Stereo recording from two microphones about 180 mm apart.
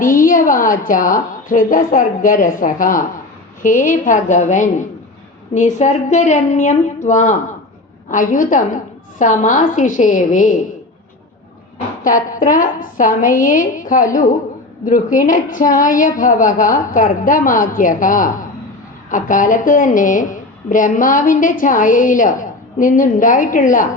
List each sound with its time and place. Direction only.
0.0 s a woman's voice: 50° left (ahead or behind)
12.0 s a woman's voice: 50° left (ahead or behind)